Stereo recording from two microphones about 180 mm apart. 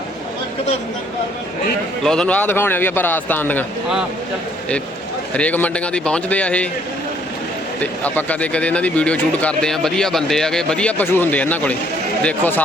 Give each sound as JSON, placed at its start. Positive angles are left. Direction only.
{"t": 2.0, "sound": "a man's voice", "side_deg": 5}
{"t": 5.4, "sound": "a man's voice", "side_deg": 10}
{"t": 7.8, "sound": "a man's voice", "side_deg": 10}